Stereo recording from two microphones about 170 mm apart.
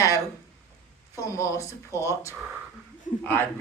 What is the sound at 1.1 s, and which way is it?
Speech, 20° left (ahead or behind).